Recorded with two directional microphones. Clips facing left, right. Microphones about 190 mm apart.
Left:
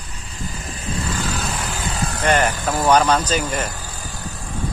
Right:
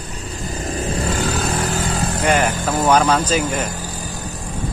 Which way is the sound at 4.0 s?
40° right (ahead or behind).